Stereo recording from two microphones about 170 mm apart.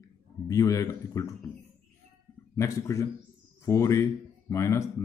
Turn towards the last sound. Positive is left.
turn(degrees=15)  # may be behind; listen again after turning